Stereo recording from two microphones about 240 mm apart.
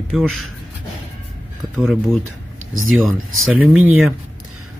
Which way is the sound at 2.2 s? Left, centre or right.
Right.